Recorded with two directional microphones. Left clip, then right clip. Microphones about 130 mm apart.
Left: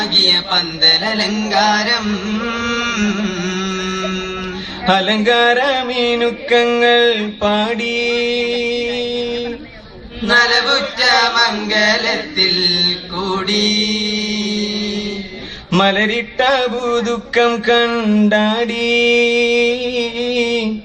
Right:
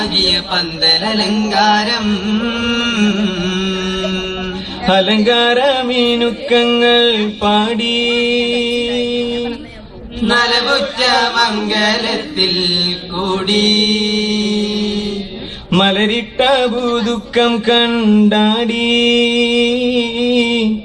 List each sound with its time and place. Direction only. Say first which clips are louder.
0.0 s music: left 1 dB; 35° left (ahead or behind)
10.2 s chant: left 1 dB; 35° left (ahead or behind)
15.7 s music: right 1 dB; 35° left (ahead or behind)